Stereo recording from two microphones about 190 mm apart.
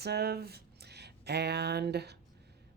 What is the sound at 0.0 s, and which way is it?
Speech, 60° right (ahead or behind).